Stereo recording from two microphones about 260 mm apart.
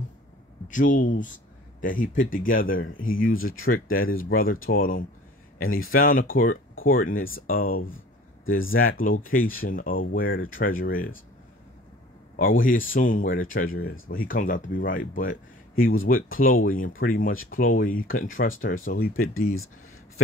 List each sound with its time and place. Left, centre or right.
0.7 s speech: left
5.6 s speech: left
5.9 s speech: left
9.0 s speech: left
12.4 s speech: left
15.8 s speech: left
16.1 s speech: left